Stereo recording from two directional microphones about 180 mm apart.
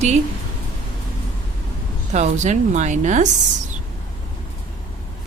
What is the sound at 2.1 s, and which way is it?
A woman's voice, 40° right (ahead or behind).